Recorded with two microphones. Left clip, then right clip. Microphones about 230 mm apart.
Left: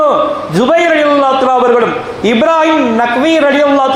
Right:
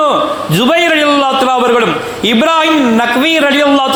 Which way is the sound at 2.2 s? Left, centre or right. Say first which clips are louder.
Left 1 dB; right.